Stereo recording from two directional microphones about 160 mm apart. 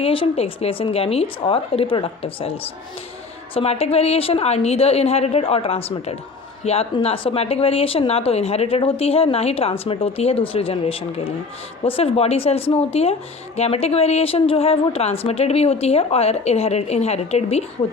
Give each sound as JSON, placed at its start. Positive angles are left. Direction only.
{"t": 0.0, "sound": "speech", "side_deg": 35}